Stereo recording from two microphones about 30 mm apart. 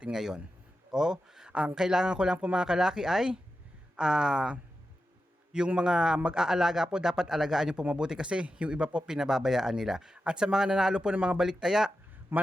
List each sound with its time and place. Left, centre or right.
0.1 s speech: centre
1.5 s speech: right
1.7 s speech: centre
5.8 s speech: right
7.9 s speech: right
8.4 s speech: right
9.0 s speech: centre
11.1 s speech: right
11.3 s speech: centre